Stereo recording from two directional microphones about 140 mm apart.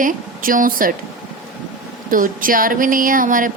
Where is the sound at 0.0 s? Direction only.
75° right (ahead or behind).